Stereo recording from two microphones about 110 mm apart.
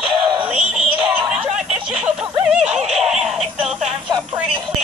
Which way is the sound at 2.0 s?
10° right (ahead or behind).